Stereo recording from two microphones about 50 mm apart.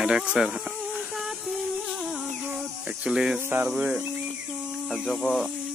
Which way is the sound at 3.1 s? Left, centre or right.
Centre.